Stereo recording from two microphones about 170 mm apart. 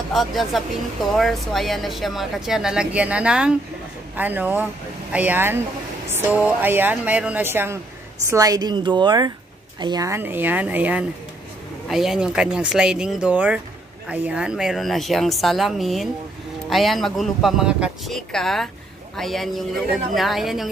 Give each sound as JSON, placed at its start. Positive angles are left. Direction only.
{"t": 0.1, "sound": "a woman's voice", "side_deg": 0}